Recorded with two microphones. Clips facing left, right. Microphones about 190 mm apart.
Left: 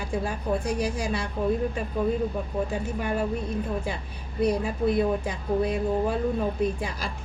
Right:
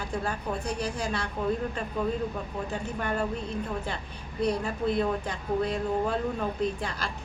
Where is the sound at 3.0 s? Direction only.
10° left (ahead or behind).